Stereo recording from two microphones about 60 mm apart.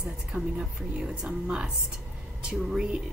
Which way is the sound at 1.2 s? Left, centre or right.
Centre.